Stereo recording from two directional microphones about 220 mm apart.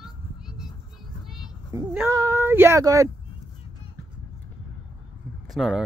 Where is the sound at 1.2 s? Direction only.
Centre (ahead or behind).